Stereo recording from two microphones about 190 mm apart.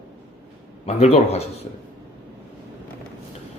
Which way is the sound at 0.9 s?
35° left (ahead or behind).